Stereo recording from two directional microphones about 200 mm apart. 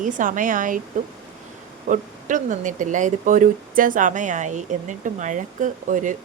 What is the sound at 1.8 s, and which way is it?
Speech, 40° right (ahead or behind).